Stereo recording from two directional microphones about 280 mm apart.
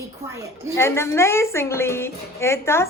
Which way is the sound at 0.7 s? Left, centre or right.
Centre.